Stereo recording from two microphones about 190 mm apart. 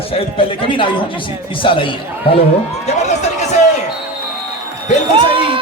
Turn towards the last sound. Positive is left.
turn(degrees=-25)  # may be behind; listen again after turning